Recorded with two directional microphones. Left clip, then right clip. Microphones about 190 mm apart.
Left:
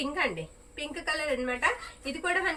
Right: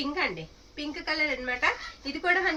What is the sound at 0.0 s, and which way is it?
A woman's voice, 5° left (ahead or behind).